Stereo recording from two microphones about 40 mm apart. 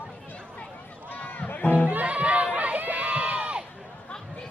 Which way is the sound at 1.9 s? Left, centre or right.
Right.